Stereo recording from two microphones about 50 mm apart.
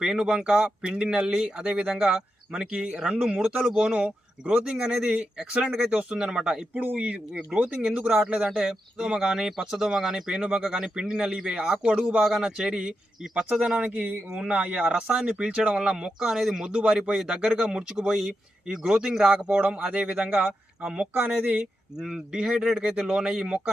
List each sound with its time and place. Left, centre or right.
0.0 s speech: centre
3.7 s speech: centre
6.7 s speech: right
8.4 s speech: centre; by 15.0 s right
15.0 s speech: centre
19.3 s speech: right
22.0 s speech: centre